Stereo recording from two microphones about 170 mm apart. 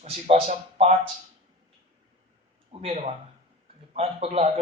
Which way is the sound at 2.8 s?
40° right (ahead or behind).